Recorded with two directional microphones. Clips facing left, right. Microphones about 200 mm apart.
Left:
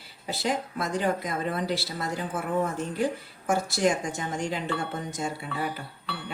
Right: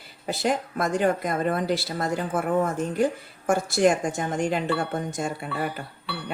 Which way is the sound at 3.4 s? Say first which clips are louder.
Right 4 dB; 50° right (ahead or behind).